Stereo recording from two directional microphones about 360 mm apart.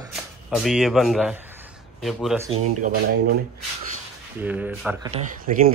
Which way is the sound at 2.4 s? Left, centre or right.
Centre.